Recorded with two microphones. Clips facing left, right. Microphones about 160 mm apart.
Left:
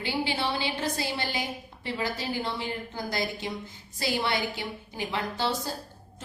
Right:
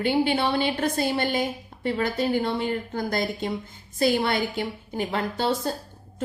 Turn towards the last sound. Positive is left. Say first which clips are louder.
# right 4 dB
turn(degrees=-55)  # may be behind; listen again after turning